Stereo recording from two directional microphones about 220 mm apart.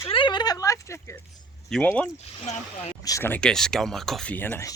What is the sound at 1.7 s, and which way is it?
Speech, 5° left (ahead or behind).